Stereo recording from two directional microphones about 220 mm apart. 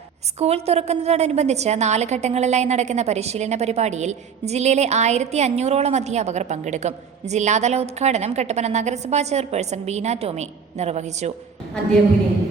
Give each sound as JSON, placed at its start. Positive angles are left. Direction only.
{"t": 0.3, "sound": "a woman's voice", "side_deg": -30}